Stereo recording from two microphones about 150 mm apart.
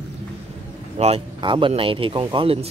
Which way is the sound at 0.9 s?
45° right (ahead or behind).